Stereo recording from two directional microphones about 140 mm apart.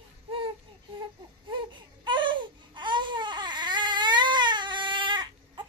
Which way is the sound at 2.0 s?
35° right (ahead or behind).